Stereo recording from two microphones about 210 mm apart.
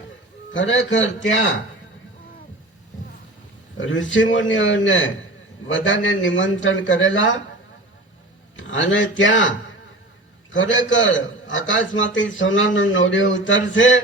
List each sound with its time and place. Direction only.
0.5 s a man's voice: 60° left (ahead or behind)
3.8 s a man's voice: 65° left (ahead or behind)
8.5 s a man's voice: 65° left (ahead or behind)